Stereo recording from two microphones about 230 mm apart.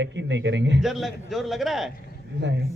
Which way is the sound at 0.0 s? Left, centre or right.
Right.